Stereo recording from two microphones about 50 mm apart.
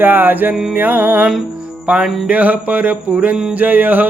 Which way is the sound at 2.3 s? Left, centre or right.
Right.